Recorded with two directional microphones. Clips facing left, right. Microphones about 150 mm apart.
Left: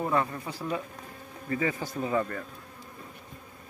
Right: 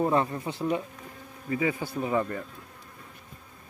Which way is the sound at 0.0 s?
30° right (ahead or behind).